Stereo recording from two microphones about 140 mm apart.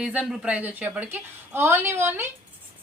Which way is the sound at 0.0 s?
5° right (ahead or behind).